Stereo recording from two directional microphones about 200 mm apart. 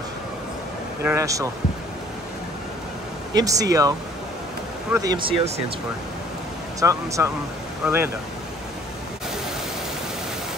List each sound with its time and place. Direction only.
1.0 s speech: 15° right (ahead or behind)
3.3 s speech: 15° right (ahead or behind)
4.9 s speech: 20° right (ahead or behind)
6.8 s speech: 15° right (ahead or behind)